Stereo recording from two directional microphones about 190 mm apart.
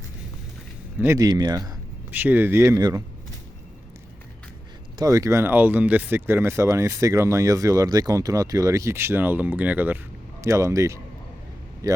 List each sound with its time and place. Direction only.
0.9 s speech: 15° right (ahead or behind)
2.0 s speech: 10° right (ahead or behind)
4.9 s speech: 15° right (ahead or behind)